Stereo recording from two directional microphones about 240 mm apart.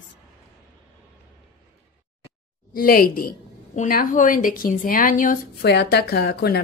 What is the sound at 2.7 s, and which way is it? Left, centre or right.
A woman's voice, left.